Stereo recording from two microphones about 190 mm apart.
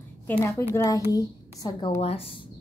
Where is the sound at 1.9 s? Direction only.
30° left (ahead or behind).